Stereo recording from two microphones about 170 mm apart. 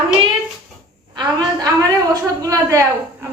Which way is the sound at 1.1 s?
25° right (ahead or behind).